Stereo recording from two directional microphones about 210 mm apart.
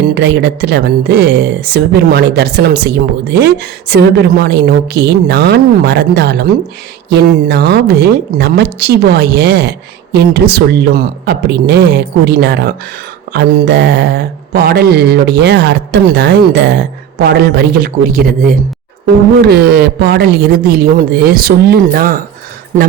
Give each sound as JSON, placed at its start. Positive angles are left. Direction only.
{"t": 0.1, "sound": "speech", "side_deg": -55}